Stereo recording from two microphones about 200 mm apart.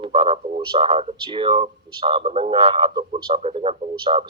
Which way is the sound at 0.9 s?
35° right (ahead or behind).